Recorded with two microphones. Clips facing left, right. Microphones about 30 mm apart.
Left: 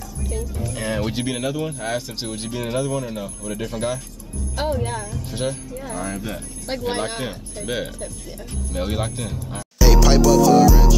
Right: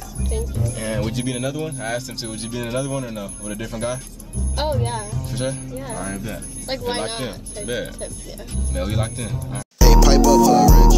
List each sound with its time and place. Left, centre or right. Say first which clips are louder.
0.7 s music: left 2 dB; centre
1.1 s speech: even; centre
4.6 s speech: right 1 dB; right
5.1 s speech: even; centre
6.7 s speech: even; right
7.2 s speech: even; centre
7.6 s speech: even; centre